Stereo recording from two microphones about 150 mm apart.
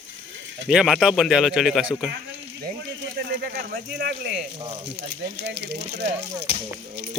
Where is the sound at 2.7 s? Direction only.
90° right.